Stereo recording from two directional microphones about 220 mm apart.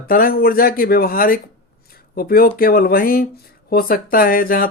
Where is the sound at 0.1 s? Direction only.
40° left (ahead or behind).